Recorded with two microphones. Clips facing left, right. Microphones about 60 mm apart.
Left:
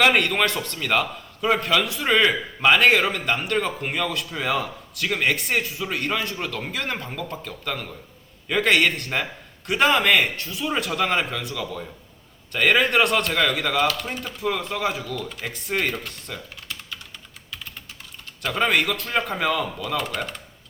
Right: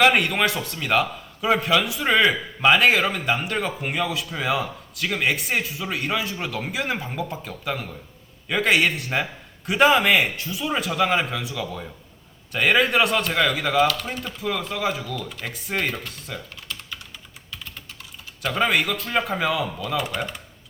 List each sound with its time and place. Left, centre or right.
0.0 s a man's voice: centre
18.4 s a man's voice: centre